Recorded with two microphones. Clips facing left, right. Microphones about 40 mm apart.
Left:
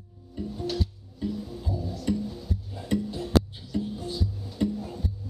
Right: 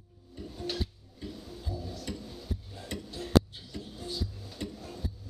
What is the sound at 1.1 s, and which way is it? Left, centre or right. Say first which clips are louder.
Music: left 10 dB; centre.